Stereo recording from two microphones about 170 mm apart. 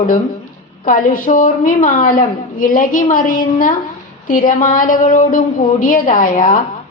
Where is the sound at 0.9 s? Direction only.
55° left (ahead or behind).